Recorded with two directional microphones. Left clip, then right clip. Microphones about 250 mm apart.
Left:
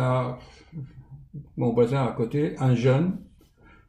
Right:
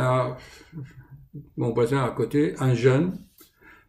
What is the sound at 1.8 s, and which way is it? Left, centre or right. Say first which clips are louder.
A man's voice: even; centre.